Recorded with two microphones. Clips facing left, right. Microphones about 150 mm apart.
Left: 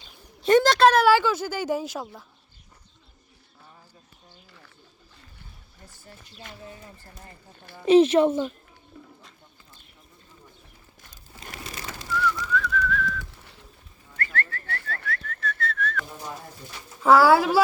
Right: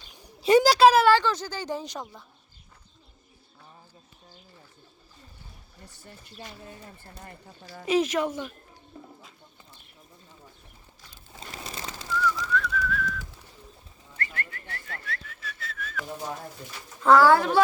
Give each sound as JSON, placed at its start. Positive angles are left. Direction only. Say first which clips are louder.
{"t": 0.2, "sound": "a sound", "louder": "left 1 dB", "side_deg": -5}
{"t": 1.0, "sound": "speech", "louder": "left 1 dB", "side_deg": 5}
{"t": 5.8, "sound": "a sound", "louder": "even", "side_deg": -65}
{"t": 7.9, "sound": "a woman's voice", "louder": "left 8 dB", "side_deg": 30}
{"t": 12.4, "sound": "whistling", "louder": "left 2 dB", "side_deg": -5}
{"t": 14.2, "sound": "whistling", "louder": "left 5 dB", "side_deg": -15}
{"t": 15.3, "sound": "whistling", "louder": "left 10 dB", "side_deg": -5}
{"t": 17.0, "sound": "speech", "louder": "left 1 dB", "side_deg": 5}